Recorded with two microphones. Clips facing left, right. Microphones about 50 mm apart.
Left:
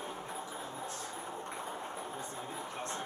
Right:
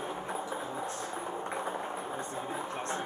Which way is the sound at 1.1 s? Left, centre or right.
Centre.